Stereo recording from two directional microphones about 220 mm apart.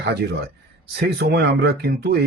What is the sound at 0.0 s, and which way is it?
Speech, 50° right (ahead or behind).